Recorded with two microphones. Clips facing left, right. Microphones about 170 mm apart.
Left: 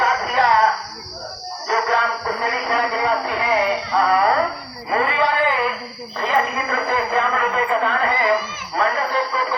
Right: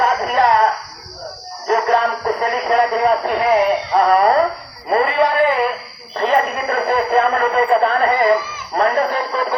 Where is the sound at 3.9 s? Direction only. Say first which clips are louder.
Right 4 dB; 45° right (ahead or behind).